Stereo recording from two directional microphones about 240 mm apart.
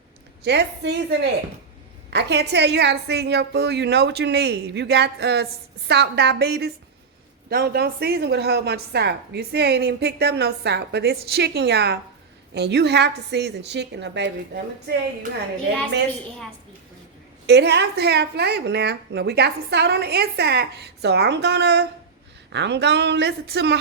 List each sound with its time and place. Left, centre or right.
0.4 s a woman's voice: right
17.4 s a woman's voice: right